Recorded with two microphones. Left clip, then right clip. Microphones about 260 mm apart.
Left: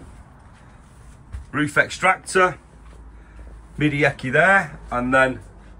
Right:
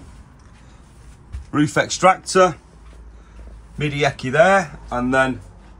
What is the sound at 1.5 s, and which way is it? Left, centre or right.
Speech, centre.